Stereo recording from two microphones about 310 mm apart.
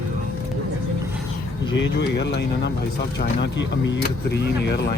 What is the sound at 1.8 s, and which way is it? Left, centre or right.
Speech, left.